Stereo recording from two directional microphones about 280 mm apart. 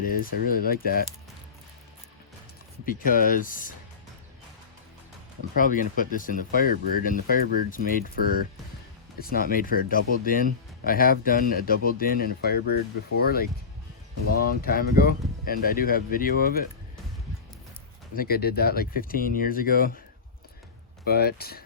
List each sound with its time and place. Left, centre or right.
0.0 s speech: left
2.8 s speech: left
5.5 s speech: left
9.1 s speech: left
18.2 s speech: left
21.0 s speech: left